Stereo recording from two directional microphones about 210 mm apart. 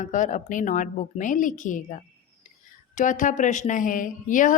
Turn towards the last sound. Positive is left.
turn(degrees=40)  # may be behind; listen again after turning